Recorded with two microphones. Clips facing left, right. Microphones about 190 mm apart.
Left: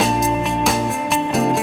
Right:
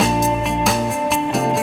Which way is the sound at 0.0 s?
Centre (ahead or behind).